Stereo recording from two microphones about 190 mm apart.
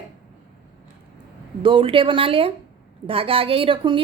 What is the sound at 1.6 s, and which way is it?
A woman's voice, 25° right (ahead or behind).